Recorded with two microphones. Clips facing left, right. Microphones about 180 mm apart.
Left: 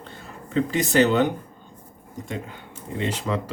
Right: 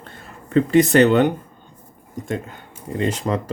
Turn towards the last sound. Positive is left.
turn(degrees=-45)  # may be behind; listen again after turning